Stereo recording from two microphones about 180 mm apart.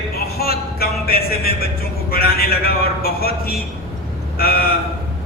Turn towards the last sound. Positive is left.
turn(degrees=60)  # may be behind; listen again after turning